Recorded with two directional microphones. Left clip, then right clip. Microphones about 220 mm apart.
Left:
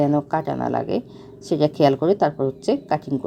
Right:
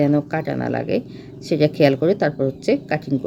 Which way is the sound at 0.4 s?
Centre (ahead or behind).